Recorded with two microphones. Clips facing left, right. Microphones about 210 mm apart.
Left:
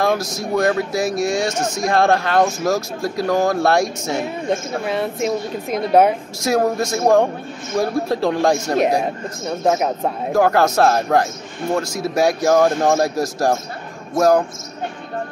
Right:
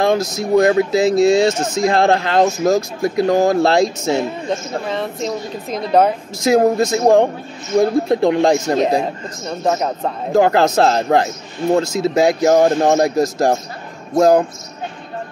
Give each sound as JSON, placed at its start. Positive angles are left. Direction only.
{"t": 0.0, "sound": "speech", "side_deg": -20}
{"t": 4.8, "sound": "speech", "side_deg": 10}
{"t": 6.4, "sound": "speech", "side_deg": -20}
{"t": 9.7, "sound": "speech", "side_deg": 5}
{"t": 10.3, "sound": "speech", "side_deg": -20}